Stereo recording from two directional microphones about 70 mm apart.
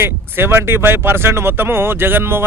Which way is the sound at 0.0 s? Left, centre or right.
Right.